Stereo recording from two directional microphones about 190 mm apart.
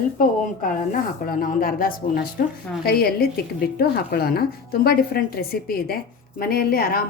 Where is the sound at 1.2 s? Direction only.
50° left (ahead or behind).